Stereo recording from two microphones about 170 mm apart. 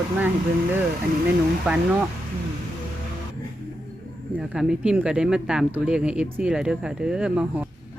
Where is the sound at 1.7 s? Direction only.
5° right (ahead or behind).